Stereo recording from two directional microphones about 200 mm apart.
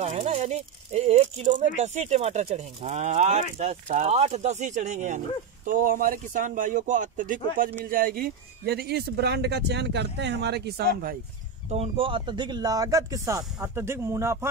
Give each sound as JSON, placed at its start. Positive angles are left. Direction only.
{"t": 0.0, "sound": "a man's voice", "side_deg": -35}
{"t": 11.7, "sound": "speech", "side_deg": -30}